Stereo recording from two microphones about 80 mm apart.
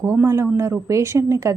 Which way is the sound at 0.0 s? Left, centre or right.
Right.